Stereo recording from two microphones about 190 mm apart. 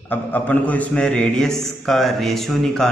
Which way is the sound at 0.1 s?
10° left (ahead or behind).